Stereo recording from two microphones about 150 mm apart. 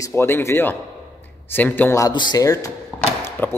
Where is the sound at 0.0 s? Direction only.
15° left (ahead or behind).